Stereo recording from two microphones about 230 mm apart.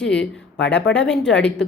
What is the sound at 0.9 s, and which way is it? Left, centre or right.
Speech, centre.